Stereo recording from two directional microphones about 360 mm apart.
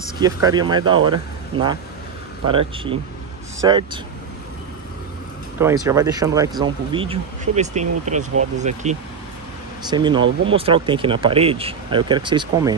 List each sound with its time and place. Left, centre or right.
0.2 s speech: centre
3.6 s speech: centre
5.6 s speech: centre